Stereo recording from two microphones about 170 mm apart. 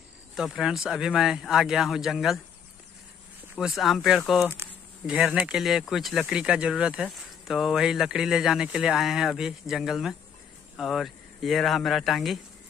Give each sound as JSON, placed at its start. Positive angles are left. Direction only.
{"t": 0.4, "sound": "speech", "side_deg": 0}
{"t": 3.5, "sound": "speech", "side_deg": 0}